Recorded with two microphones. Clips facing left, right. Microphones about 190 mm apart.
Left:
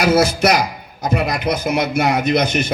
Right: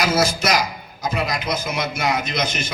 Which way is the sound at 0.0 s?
60° left (ahead or behind).